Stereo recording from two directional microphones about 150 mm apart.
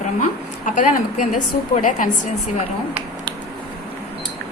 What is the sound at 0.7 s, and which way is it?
A woman's voice, 60° left (ahead or behind).